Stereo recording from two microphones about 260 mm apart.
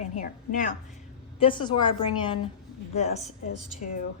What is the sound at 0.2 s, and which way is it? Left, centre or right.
Speech, left.